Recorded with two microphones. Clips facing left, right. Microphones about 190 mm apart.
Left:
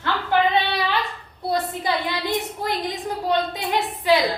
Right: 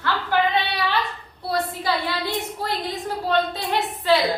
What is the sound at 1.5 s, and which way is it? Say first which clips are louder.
A woman's voice: even; 20° left (ahead or behind).